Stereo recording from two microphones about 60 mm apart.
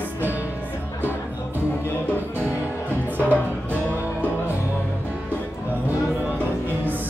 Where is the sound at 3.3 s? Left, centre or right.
Left.